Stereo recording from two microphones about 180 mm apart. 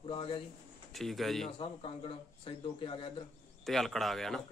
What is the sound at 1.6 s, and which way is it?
Speech, 30° left (ahead or behind).